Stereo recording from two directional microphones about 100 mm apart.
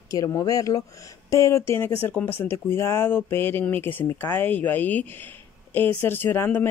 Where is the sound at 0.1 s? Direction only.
35° left (ahead or behind).